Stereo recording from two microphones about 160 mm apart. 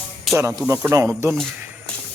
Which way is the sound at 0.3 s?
20° right (ahead or behind).